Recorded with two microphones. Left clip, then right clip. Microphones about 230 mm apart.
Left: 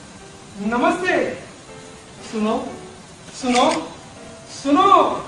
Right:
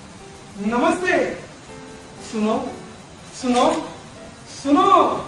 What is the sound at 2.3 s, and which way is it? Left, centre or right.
Speech, left.